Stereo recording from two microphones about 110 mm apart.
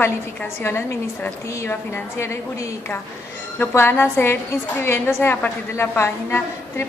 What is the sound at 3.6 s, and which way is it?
A woman's voice, 20° left (ahead or behind).